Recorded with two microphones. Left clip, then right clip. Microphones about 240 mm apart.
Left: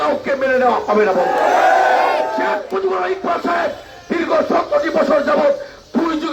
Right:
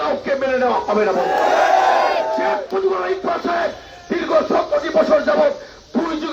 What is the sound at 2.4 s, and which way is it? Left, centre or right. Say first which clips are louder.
Music: even; left.